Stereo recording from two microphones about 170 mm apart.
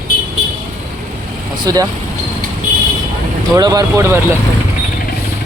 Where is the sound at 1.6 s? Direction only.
20° right (ahead or behind).